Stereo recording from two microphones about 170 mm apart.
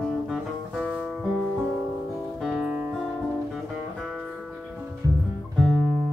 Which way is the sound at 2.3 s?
5° right (ahead or behind).